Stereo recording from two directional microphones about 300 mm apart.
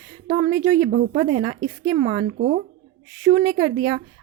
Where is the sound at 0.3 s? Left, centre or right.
Right.